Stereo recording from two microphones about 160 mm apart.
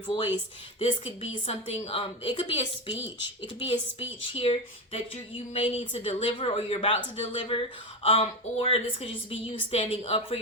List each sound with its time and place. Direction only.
0.8 s a woman's voice: 40° left (ahead or behind)